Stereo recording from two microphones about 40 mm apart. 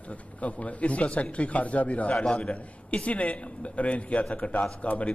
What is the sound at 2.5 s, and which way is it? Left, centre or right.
Speech, left.